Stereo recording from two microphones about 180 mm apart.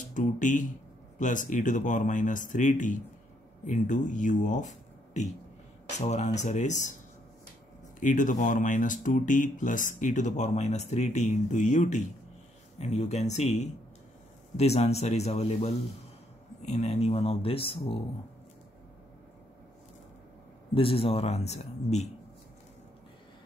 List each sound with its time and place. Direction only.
0.1 s speech: 45° left (ahead or behind)
8.0 s speech: 45° left (ahead or behind)
14.6 s speech: 35° left (ahead or behind)
20.7 s speech: 30° left (ahead or behind)